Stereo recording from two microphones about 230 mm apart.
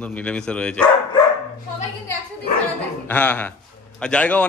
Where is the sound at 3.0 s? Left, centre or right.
Centre.